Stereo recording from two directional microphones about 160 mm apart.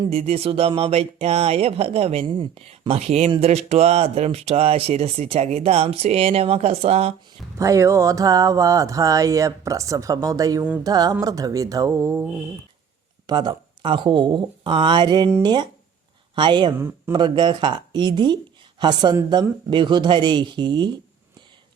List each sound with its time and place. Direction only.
0.0 s speech: 40° right (ahead or behind)
7.6 s speech: 20° right (ahead or behind)